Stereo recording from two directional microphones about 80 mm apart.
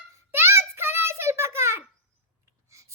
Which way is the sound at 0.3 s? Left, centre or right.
Right.